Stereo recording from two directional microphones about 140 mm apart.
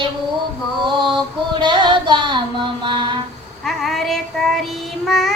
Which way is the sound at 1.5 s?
35° right (ahead or behind).